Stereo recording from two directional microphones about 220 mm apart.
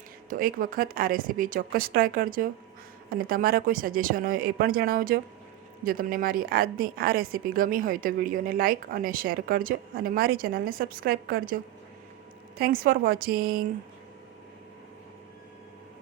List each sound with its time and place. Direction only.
0.3 s a woman's voice: 40° right (ahead or behind)
12.5 s a woman's voice: 40° right (ahead or behind)